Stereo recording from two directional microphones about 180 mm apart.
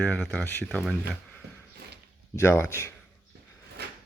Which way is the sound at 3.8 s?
65° right (ahead or behind).